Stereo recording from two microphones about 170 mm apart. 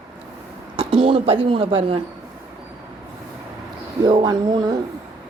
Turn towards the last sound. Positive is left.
turn(degrees=-25)  # may be behind; listen again after turning